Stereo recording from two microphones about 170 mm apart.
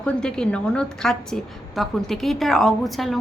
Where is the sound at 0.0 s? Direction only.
5° left (ahead or behind).